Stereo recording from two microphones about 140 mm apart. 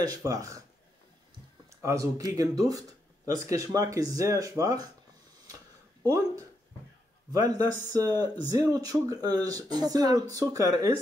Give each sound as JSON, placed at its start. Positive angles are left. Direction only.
{"t": 0.0, "sound": "speech", "side_deg": -25}
{"t": 1.7, "sound": "speech", "side_deg": -20}
{"t": 6.0, "sound": "speech", "side_deg": -25}